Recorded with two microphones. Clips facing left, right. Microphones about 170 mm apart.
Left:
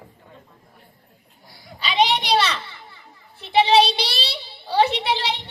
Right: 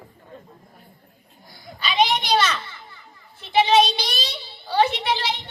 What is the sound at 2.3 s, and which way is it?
Children playing, 30° left (ahead or behind).